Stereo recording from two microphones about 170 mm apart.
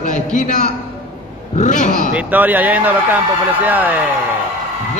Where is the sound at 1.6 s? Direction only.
45° left (ahead or behind).